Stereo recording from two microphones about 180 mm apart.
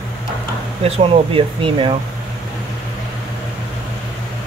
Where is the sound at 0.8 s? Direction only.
30° right (ahead or behind).